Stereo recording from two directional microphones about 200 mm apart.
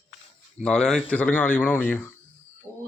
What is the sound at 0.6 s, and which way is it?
Speech, 5° left (ahead or behind).